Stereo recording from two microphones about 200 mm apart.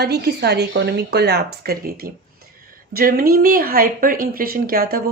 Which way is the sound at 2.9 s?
45° right (ahead or behind).